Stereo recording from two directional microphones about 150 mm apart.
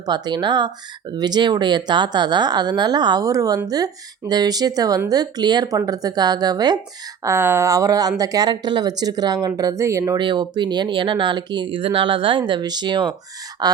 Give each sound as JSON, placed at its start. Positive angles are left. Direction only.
{"t": 0.0, "sound": "speech", "side_deg": -30}
{"t": 7.3, "sound": "speech", "side_deg": -15}
{"t": 10.2, "sound": "speech", "side_deg": -30}